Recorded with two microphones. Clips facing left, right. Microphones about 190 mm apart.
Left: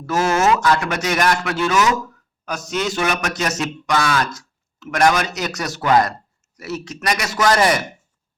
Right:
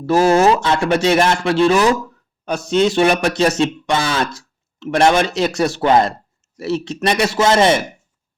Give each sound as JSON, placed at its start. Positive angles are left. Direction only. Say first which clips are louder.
{"t": 0.0, "sound": "speech", "louder": "right 6 dB", "side_deg": -30}